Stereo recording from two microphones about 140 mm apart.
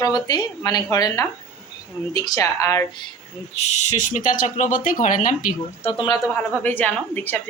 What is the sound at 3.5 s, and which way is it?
Speech, 55° left (ahead or behind).